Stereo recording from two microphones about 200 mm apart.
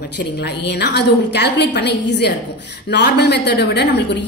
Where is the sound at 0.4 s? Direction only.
55° left (ahead or behind).